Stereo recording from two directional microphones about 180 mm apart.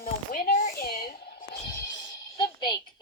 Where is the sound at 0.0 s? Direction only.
55° left (ahead or behind).